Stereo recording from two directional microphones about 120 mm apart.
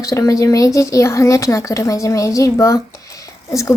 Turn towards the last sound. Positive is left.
turn(degrees=25)  # may be behind; listen again after turning